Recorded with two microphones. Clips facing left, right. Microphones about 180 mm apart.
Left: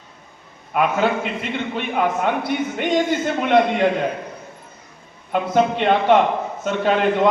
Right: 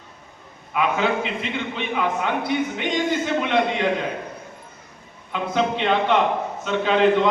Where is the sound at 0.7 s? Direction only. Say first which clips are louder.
Left 3 dB; 45° left (ahead or behind).